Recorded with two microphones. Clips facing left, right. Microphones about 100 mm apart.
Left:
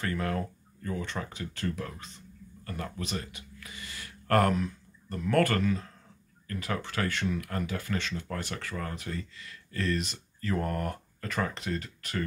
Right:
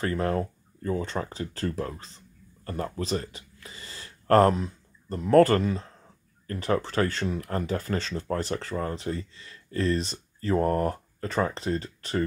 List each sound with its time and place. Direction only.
0.0 s speech: 30° right (ahead or behind)